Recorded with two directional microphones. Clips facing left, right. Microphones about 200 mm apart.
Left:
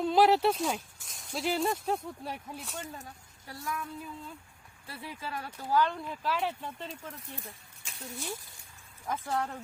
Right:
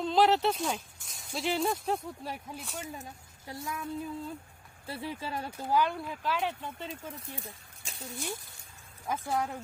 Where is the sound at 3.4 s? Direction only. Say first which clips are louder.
Even; 20° right (ahead or behind).